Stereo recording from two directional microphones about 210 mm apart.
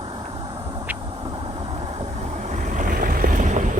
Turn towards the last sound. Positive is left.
turn(degrees=-35)  # may be behind; listen again after turning